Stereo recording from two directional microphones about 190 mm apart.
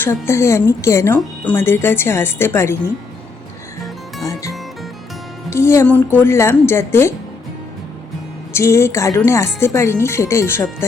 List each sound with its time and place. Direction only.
0.0 s speech: 15° left (ahead or behind)
4.2 s music: 15° left (ahead or behind)
5.5 s speech: 15° left (ahead or behind)
8.5 s speech: 15° left (ahead or behind)